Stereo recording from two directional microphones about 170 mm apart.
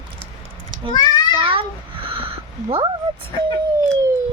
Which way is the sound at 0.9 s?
25° left (ahead or behind).